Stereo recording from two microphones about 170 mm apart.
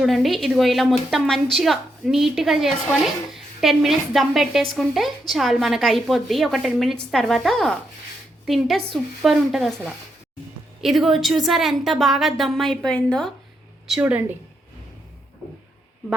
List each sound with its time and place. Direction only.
0.0 s a woman's voice: centre (ahead or behind)